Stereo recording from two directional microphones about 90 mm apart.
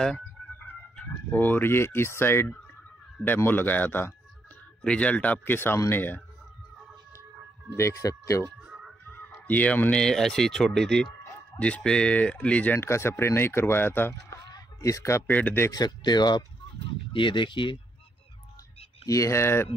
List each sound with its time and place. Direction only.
0.5 s speech: 20° left (ahead or behind)
7.7 s speech: 35° left (ahead or behind)
8.6 s a sound: 10° right (ahead or behind)
9.1 s speech: 20° left (ahead or behind)
12.7 s speech: 30° left (ahead or behind)
14.5 s a sound: 35° left (ahead or behind)
15.3 s speech: 20° left (ahead or behind)
15.7 s speech: 50° left (ahead or behind)
17.1 s speech: 65° left (ahead or behind)
19.0 s speech: 35° left (ahead or behind)